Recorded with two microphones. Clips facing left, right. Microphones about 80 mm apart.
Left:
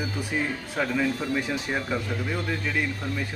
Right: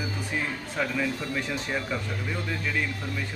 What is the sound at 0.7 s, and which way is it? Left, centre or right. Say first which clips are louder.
A man's voice: left 2 dB; centre.